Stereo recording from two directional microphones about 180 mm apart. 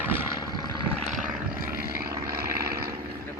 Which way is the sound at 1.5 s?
55° right (ahead or behind).